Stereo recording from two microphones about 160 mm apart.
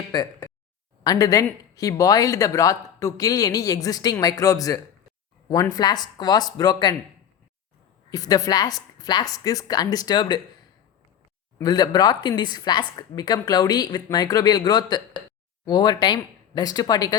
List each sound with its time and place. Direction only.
0.1 s speech: 25° left (ahead or behind)
8.1 s speech: 25° left (ahead or behind)
11.6 s speech: 25° left (ahead or behind)